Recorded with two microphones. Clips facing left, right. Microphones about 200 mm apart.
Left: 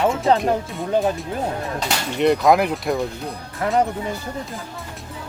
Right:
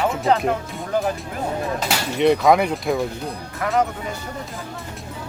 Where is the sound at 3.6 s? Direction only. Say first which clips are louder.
Left 2 dB; 30° left (ahead or behind).